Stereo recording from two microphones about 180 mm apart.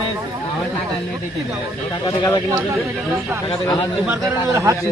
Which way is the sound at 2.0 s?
20° left (ahead or behind).